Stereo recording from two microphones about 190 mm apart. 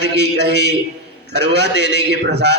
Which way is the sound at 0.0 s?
65° right (ahead or behind).